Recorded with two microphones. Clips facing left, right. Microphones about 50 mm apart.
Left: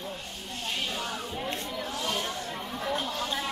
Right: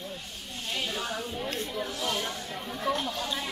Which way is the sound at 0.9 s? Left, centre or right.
Centre.